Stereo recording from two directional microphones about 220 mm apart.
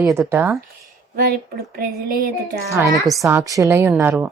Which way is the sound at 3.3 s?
15° right (ahead or behind).